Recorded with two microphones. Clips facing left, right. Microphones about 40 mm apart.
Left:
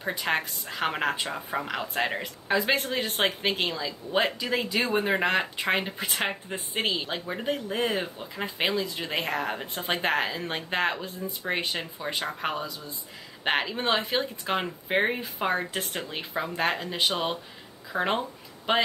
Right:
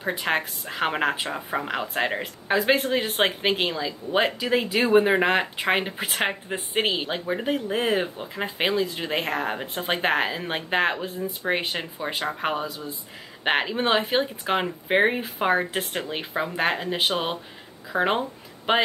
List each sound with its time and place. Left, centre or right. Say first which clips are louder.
0.2 s speech: right 2 dB; centre